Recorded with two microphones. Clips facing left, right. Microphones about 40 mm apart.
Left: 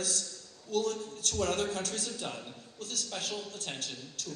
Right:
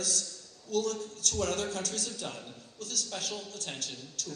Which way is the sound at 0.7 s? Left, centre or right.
Left.